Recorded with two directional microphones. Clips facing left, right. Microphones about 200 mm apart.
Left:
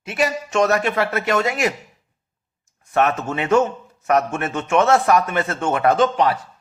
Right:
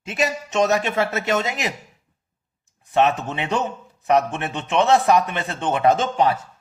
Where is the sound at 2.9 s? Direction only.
20° right (ahead or behind).